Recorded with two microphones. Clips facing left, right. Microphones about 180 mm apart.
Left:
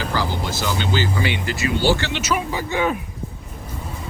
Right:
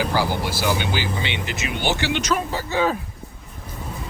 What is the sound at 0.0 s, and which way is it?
Vehicle, 10° right (ahead or behind).